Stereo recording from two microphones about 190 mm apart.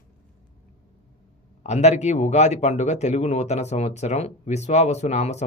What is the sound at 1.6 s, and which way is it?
Speech, 35° left (ahead or behind).